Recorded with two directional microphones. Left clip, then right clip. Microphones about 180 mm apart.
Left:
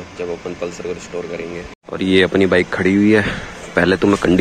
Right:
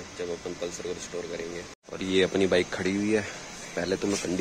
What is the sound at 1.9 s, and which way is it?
A man's voice, 5° left (ahead or behind).